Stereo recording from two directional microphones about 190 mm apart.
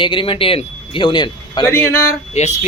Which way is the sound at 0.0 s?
25° left (ahead or behind).